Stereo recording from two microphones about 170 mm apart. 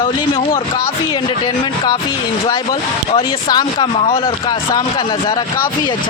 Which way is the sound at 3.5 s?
30° left (ahead or behind).